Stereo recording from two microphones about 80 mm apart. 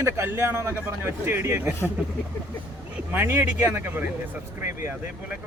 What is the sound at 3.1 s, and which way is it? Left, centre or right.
Speech, right.